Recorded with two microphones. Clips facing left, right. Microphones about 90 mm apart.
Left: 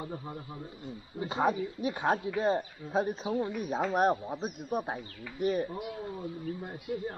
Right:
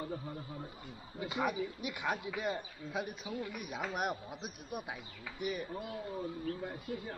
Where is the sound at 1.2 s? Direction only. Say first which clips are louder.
Left 6 dB; 30° left (ahead or behind).